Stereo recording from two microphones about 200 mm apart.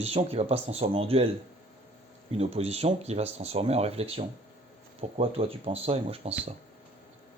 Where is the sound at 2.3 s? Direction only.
30° right (ahead or behind).